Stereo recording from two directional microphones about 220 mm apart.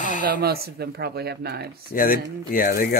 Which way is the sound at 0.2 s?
40° right (ahead or behind).